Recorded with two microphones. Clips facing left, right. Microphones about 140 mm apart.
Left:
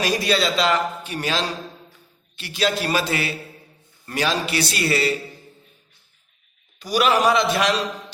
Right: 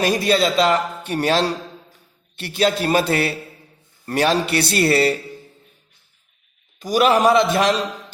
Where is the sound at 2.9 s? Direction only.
60° right (ahead or behind).